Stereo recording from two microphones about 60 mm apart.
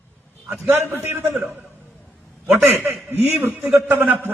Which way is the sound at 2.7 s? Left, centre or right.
Right.